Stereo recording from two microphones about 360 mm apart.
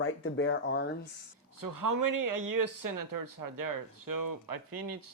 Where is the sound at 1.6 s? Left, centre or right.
Right.